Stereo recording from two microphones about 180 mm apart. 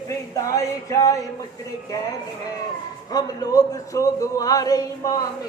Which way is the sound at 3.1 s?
20° left (ahead or behind).